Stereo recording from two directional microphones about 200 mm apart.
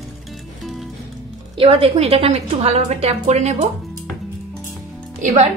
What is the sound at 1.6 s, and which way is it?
A woman's voice, 30° right (ahead or behind).